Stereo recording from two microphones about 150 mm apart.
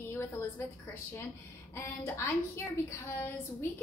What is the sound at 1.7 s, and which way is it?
A woman's voice, 15° left (ahead or behind).